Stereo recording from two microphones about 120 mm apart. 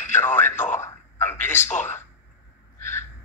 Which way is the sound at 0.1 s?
20° left (ahead or behind).